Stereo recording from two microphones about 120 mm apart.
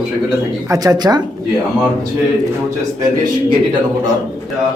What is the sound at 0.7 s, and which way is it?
Speech, 30° right (ahead or behind).